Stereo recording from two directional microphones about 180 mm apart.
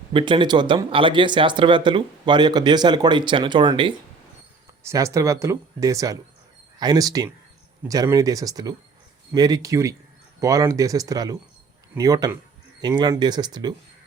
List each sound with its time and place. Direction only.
0.1 s speech: 30° right (ahead or behind)